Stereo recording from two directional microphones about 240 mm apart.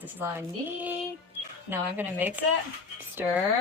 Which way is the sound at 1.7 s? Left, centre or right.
Centre.